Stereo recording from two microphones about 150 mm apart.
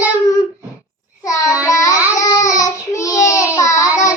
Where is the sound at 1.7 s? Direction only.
20° left (ahead or behind).